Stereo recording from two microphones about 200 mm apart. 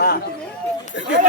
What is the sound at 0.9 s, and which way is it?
Speech, 60° left (ahead or behind).